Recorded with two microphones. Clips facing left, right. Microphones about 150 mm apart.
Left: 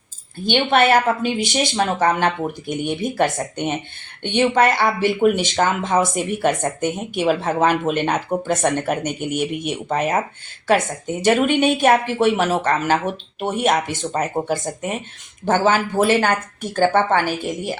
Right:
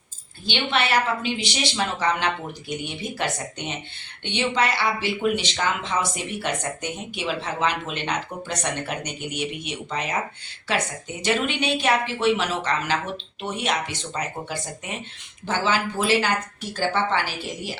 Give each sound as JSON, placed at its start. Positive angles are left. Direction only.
{"t": 0.4, "sound": "speech", "side_deg": 50}